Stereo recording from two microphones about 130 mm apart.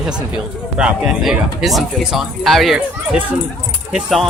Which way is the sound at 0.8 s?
5° right (ahead or behind).